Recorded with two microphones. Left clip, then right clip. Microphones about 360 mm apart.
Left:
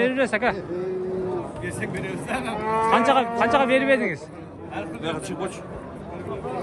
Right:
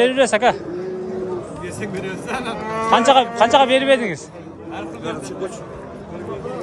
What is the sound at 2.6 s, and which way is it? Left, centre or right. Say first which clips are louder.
Speech: left 3 dB; left.